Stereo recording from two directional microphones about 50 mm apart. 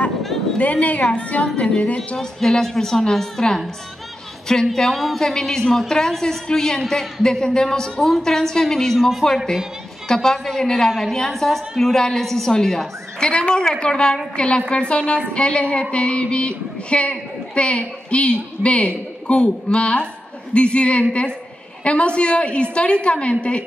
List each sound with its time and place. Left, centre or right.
0.6 s music: left
2.1 s a woman's voice: centre
4.7 s a woman's voice: centre; by 14.6 s left
14.7 s music: left